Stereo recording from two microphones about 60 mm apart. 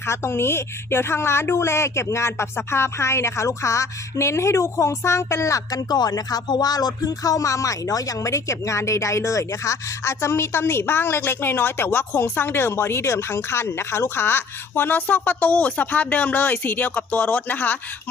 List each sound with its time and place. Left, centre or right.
0.0 s a woman's voice: left